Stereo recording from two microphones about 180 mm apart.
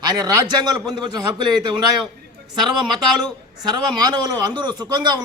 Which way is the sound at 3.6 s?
25° right (ahead or behind).